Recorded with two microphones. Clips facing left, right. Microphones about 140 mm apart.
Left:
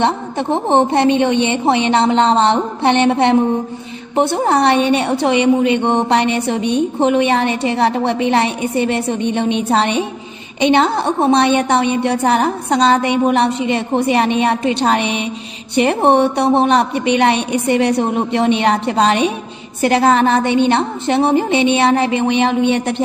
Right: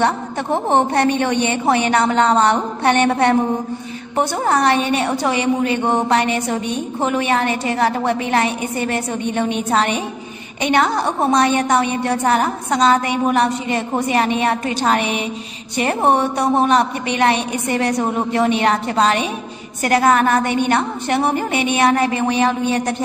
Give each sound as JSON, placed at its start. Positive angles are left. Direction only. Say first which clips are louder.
{"t": 0.0, "sound": "a woman's voice", "louder": "left 2 dB", "side_deg": 20}
{"t": 4.5, "sound": "a woman's voice", "louder": "left 2 dB", "side_deg": 30}
{"t": 5.3, "sound": "speech", "louder": "left 8 dB", "side_deg": -35}
{"t": 5.9, "sound": "a woman's voice", "louder": "left 2 dB", "side_deg": 30}